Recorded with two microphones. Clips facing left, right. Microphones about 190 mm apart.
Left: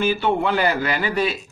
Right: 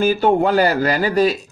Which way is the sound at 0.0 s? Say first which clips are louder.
Right 5 dB; 40° right (ahead or behind).